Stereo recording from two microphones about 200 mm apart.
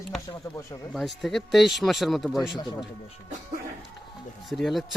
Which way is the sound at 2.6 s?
20° left (ahead or behind).